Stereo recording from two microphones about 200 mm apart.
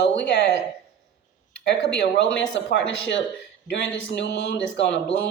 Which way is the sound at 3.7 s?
60° left (ahead or behind).